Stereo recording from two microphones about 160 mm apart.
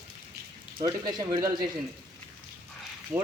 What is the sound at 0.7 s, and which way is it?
Speech, 25° right (ahead or behind).